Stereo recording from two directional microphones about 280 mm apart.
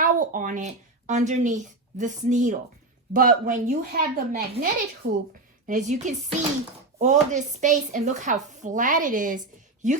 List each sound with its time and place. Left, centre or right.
0.0 s a child's voice: right
5.6 s speech: right